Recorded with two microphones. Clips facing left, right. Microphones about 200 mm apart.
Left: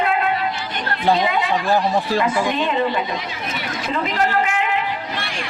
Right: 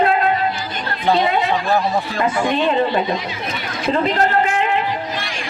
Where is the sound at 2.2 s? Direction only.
35° right (ahead or behind).